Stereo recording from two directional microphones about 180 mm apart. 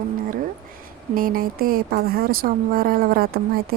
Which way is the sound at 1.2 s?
50° right (ahead or behind).